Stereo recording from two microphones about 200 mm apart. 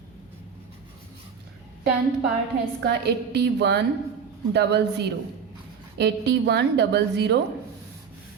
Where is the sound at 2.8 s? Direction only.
55° right (ahead or behind).